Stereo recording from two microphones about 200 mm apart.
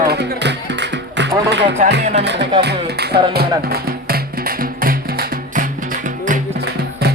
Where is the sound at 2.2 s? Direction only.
60° right (ahead or behind).